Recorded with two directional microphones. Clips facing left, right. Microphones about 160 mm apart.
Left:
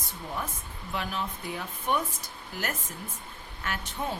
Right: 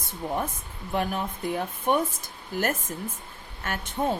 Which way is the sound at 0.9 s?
50° right (ahead or behind).